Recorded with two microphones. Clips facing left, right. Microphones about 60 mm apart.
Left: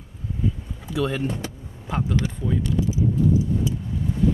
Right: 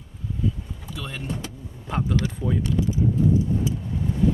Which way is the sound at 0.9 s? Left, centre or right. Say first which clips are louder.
Left 11 dB; left.